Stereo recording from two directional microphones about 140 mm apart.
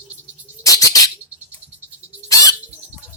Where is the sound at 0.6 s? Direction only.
25° left (ahead or behind).